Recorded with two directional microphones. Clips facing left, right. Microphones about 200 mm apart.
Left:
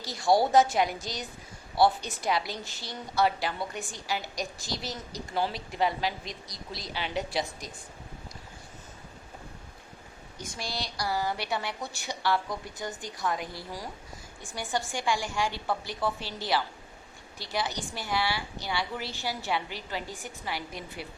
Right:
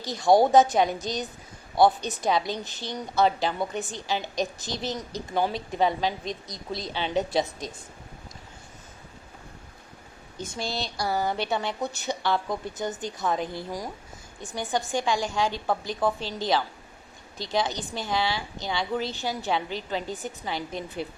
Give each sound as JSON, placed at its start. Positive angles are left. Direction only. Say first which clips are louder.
{"t": 0.0, "sound": "a woman's voice", "louder": "right 5 dB", "side_deg": -20}
{"t": 10.3, "sound": "a woman's voice", "louder": "right 5 dB", "side_deg": -25}